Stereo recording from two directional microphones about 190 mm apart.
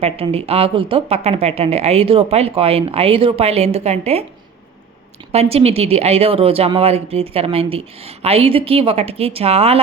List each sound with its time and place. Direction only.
0.0 s speech: 30° right (ahead or behind)
5.3 s speech: 35° right (ahead or behind)